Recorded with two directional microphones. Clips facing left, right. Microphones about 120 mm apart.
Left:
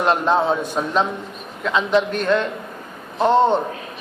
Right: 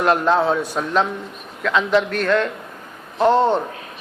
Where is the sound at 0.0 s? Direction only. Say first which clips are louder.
Right 1 dB; 20° left (ahead or behind).